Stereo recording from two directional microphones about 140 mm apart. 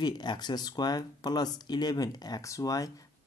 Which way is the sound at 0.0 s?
30° left (ahead or behind).